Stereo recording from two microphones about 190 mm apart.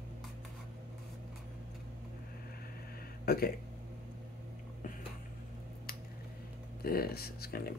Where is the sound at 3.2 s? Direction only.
50° left (ahead or behind).